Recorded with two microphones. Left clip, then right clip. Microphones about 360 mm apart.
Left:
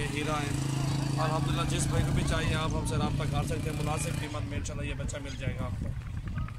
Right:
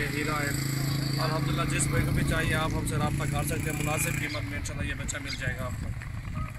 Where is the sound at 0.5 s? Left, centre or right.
Left.